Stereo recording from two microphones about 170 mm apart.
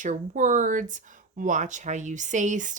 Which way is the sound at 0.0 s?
50° right (ahead or behind).